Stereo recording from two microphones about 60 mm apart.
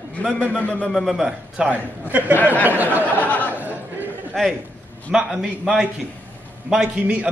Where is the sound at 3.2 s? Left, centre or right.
Left.